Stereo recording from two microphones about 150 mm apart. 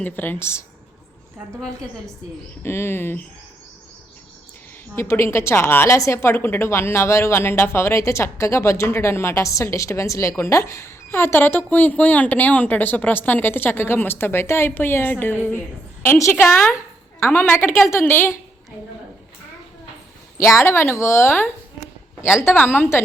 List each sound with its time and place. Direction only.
0.0 s a woman's voice: 10° left (ahead or behind)
2.6 s a woman's voice: 15° left (ahead or behind)
4.9 s a woman's voice: 15° left (ahead or behind)
20.4 s a woman's voice: 20° left (ahead or behind)